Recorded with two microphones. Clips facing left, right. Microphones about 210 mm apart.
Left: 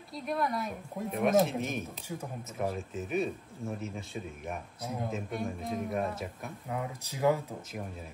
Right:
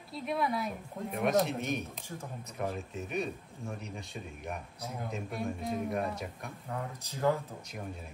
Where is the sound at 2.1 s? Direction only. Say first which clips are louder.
Left 3 dB; 10° left (ahead or behind).